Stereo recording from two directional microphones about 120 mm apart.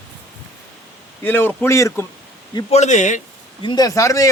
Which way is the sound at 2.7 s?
75° left (ahead or behind).